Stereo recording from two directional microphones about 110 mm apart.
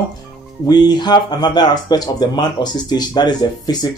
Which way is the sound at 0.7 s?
40° left (ahead or behind).